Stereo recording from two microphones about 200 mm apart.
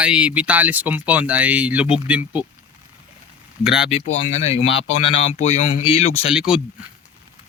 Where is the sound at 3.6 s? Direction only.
5° right (ahead or behind).